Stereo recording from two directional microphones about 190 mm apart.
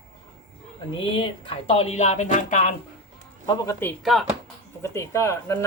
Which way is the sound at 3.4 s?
20° left (ahead or behind).